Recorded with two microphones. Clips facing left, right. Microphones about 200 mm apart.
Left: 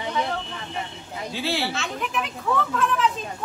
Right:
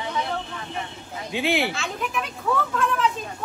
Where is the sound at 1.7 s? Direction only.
Centre (ahead or behind).